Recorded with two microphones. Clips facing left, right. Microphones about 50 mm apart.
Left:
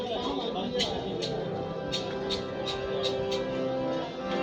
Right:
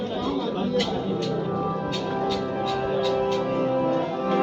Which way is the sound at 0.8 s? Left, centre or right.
Right.